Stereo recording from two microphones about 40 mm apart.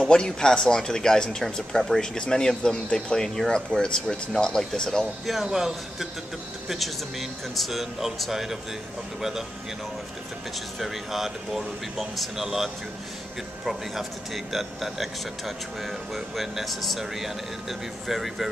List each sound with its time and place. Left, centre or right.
0.0 s speech: centre
5.2 s speech: centre
10.8 s speech: centre